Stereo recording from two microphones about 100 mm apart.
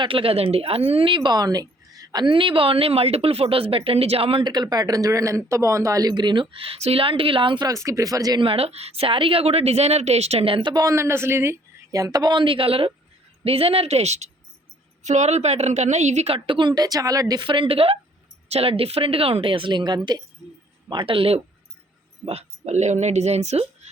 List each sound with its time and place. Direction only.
0.0 s a woman's voice: 65° right (ahead or behind); by 2.2 s 40° right (ahead or behind)
2.2 s speech: 60° right (ahead or behind)
4.4 s a woman's voice: 45° right (ahead or behind)
7.7 s speech: 30° right (ahead or behind)
8.4 s a woman's voice: 70° right (ahead or behind)
10.7 s speech: 40° right (ahead or behind)
10.9 s a woman's voice: 25° right (ahead or behind)
11.9 s a woman's voice: 35° right (ahead or behind); by 14.3 s 90° right
15.3 s a woman's voice: 90° right
16.2 s speech: 65° right (ahead or behind); by 17.4 s 35° right (ahead or behind)
17.4 s a woman's voice: 55° right (ahead or behind)
18.4 s a woman's voice: 85° right
23.2 s speech: 90° right